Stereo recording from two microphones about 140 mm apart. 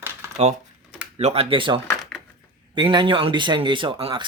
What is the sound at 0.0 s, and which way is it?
Typewriter, 20° right (ahead or behind).